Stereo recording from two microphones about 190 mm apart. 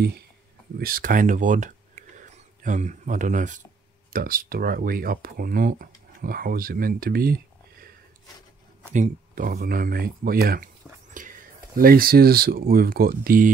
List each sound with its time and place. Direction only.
0.7 s speech: 50° right (ahead or behind)
8.9 s speech: 45° right (ahead or behind)